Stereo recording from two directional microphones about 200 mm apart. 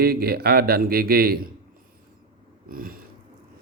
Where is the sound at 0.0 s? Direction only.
50° right (ahead or behind).